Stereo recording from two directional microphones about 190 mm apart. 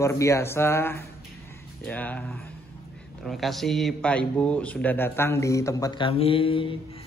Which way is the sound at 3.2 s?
Centre (ahead or behind).